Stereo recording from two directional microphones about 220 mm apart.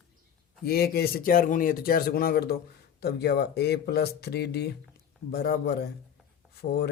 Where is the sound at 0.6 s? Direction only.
45° left (ahead or behind).